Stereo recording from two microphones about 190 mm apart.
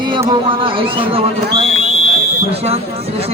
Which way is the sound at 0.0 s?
25° right (ahead or behind).